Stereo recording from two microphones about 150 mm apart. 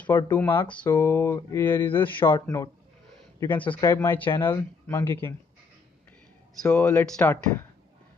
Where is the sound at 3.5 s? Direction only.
35° left (ahead or behind).